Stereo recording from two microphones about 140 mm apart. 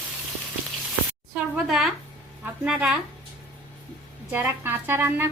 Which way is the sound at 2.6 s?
5° right (ahead or behind).